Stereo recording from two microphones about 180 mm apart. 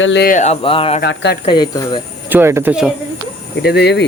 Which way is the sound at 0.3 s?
40° left (ahead or behind).